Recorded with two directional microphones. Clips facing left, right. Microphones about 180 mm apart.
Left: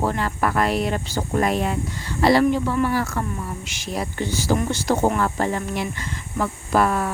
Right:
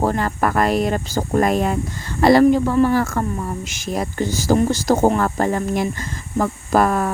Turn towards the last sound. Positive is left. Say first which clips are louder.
# right 3 dB
turn(degrees=-45)  # may be behind; listen again after turning